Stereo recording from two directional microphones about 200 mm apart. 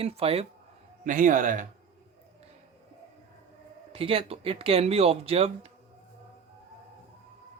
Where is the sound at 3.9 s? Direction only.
25° right (ahead or behind).